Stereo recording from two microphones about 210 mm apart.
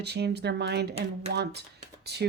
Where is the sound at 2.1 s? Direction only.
50° right (ahead or behind).